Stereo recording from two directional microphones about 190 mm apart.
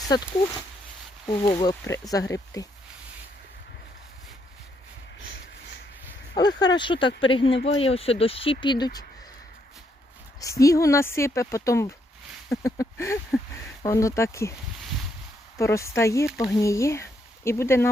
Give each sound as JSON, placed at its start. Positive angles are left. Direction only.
{"t": 0.1, "sound": "speech", "side_deg": 20}
{"t": 1.5, "sound": "speech", "side_deg": 25}
{"t": 6.6, "sound": "speech", "side_deg": 25}
{"t": 10.4, "sound": "speech", "side_deg": 15}
{"t": 15.5, "sound": "speech", "side_deg": 15}